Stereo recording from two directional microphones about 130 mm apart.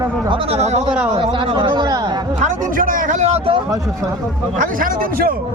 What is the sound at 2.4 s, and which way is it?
Speech, 80° right.